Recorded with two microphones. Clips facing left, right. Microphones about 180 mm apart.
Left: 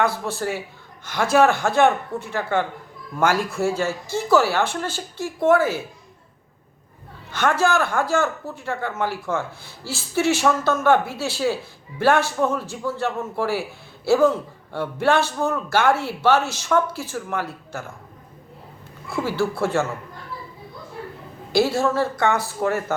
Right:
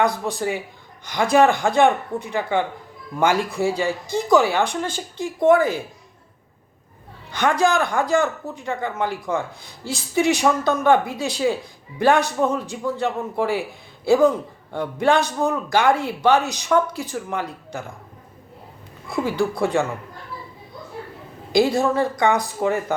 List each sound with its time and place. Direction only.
0.0 s a man's voice: 15° right (ahead or behind)
7.3 s a man's voice: 15° right (ahead or behind)
19.0 s a man's voice: 15° right (ahead or behind)
21.5 s a man's voice: 15° right (ahead or behind)